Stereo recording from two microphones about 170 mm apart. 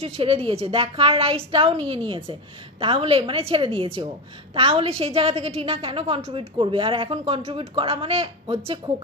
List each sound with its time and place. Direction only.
0.0 s a woman's voice: 35° right (ahead or behind)